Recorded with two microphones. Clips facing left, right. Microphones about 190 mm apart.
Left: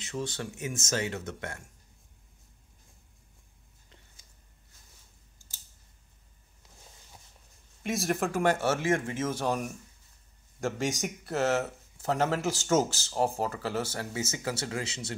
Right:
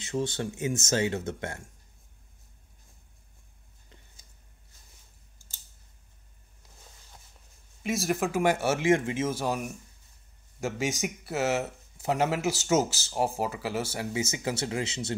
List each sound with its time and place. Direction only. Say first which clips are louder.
0.0 s speech: right 5 dB; 25° right (ahead or behind)
7.8 s speech: right 1 dB; centre (ahead or behind); by 15.1 s 25° right (ahead or behind)